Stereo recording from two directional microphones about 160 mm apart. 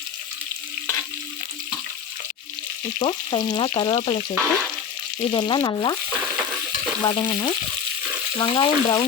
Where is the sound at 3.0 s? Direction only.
30° left (ahead or behind).